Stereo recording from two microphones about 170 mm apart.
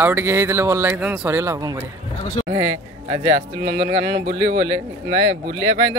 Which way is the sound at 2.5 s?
30° right (ahead or behind).